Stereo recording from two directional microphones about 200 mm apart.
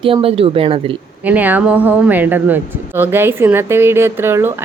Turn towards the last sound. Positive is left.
turn(degrees=-10)  # may be behind; listen again after turning